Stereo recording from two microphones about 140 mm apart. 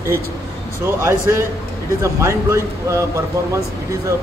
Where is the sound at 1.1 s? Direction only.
20° right (ahead or behind).